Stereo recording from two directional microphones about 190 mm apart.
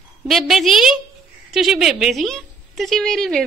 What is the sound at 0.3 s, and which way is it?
A woman's voice, centre (ahead or behind).